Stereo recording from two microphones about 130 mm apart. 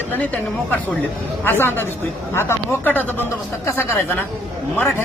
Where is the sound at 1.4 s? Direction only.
15° left (ahead or behind).